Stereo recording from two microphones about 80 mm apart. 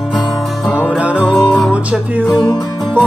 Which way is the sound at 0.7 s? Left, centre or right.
Centre.